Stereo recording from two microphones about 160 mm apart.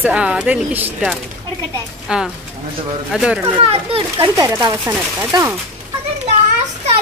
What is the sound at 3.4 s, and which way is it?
Speech, 40° right (ahead or behind).